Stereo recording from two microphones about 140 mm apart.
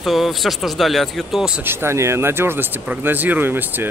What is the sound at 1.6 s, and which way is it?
Speech, 15° right (ahead or behind).